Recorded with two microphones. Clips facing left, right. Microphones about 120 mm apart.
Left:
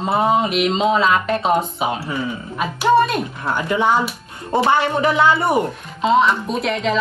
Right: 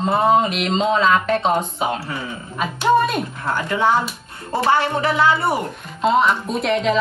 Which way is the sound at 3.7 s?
15° left (ahead or behind).